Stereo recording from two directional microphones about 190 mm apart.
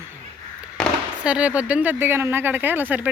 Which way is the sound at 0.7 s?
Centre (ahead or behind).